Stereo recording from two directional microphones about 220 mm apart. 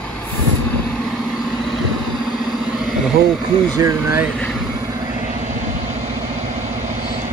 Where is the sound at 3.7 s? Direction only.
15° right (ahead or behind).